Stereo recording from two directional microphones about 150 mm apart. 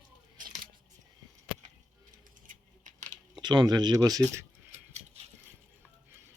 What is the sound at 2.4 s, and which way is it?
Keys jangling, 55° right (ahead or behind).